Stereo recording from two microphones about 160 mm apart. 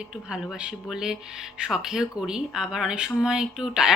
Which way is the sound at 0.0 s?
5° right (ahead or behind).